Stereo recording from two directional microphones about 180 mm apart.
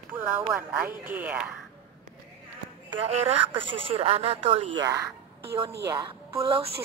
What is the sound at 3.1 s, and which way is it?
A woman's voice, 35° right (ahead or behind).